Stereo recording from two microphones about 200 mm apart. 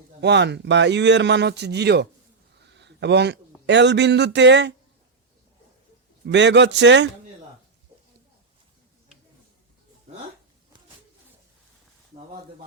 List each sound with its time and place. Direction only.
0.2 s a man's voice: 60° right (ahead or behind)
6.2 s speech: 60° right (ahead or behind)